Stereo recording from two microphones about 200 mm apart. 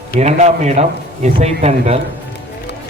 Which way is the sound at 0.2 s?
35° right (ahead or behind).